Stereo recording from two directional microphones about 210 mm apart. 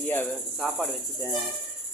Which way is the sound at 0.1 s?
10° left (ahead or behind).